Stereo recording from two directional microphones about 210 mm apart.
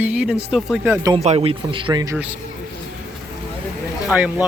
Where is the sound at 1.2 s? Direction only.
30° right (ahead or behind).